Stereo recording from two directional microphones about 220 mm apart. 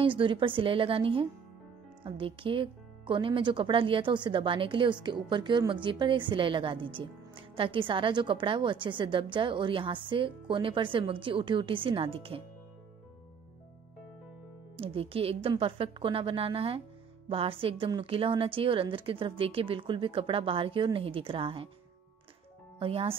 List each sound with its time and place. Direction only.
0.0 s speech: 25° right (ahead or behind)
14.8 s speech: 25° right (ahead or behind)
22.8 s speech: 25° right (ahead or behind)